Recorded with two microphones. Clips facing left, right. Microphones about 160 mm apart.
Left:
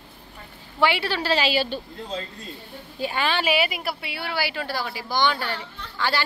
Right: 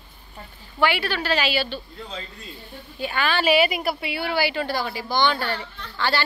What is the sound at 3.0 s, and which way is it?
Speech, 30° left (ahead or behind).